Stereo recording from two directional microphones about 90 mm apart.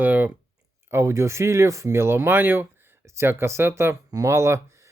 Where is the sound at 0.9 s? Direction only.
30° right (ahead or behind).